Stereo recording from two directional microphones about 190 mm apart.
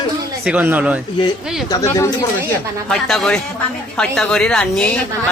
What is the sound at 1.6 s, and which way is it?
Speech, 15° left (ahead or behind).